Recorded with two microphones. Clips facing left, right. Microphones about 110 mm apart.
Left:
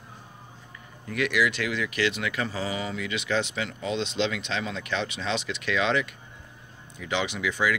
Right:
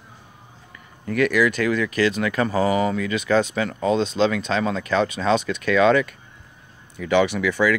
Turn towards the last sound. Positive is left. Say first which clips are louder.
# right 9 dB
turn(degrees=-55)  # may be behind; listen again after turning